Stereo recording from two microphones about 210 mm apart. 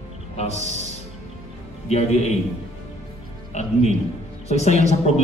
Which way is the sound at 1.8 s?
30° left (ahead or behind).